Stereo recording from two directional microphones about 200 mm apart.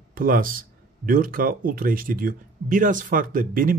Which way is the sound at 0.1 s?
45° right (ahead or behind).